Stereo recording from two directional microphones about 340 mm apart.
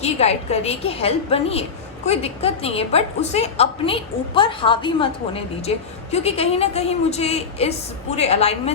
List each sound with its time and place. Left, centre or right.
0.0 s a woman's voice: centre